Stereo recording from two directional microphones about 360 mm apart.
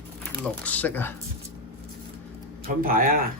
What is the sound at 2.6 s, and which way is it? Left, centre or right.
Speech, right.